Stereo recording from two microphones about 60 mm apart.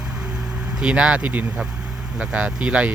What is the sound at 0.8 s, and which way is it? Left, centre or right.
Speech, centre.